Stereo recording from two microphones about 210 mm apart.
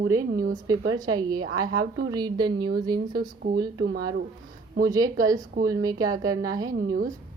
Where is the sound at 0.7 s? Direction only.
20° right (ahead or behind).